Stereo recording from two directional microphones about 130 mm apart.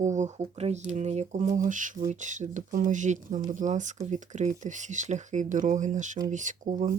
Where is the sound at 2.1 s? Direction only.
70° right (ahead or behind).